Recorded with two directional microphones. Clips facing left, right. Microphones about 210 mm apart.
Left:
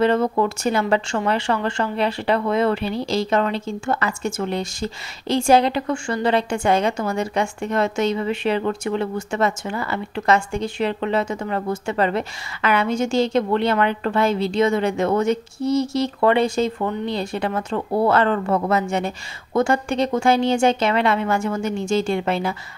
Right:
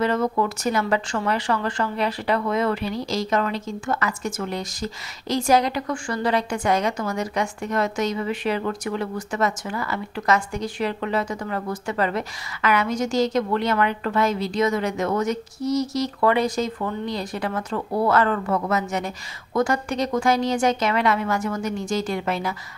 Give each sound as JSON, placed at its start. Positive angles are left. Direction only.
{"t": 0.0, "sound": "speech", "side_deg": 30}